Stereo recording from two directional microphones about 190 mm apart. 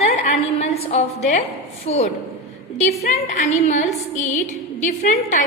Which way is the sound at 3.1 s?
35° left (ahead or behind).